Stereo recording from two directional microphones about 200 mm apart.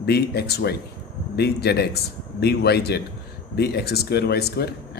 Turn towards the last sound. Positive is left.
turn(degrees=55)  # may be behind; listen again after turning